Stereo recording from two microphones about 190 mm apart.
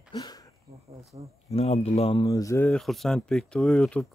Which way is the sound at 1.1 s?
30° right (ahead or behind).